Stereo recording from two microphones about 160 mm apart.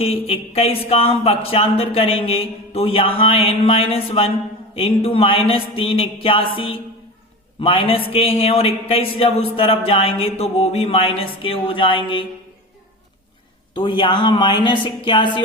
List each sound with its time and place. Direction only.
0.0 s speech: 40° left (ahead or behind)
13.7 s a woman's voice: 30° left (ahead or behind)